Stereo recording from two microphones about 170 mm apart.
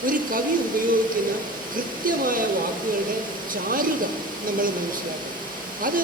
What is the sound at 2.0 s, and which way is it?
Speech, 55° right (ahead or behind).